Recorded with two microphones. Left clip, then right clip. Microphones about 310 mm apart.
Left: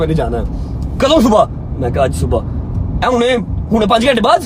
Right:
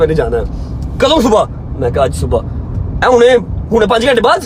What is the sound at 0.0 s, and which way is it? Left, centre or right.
A man's voice, centre.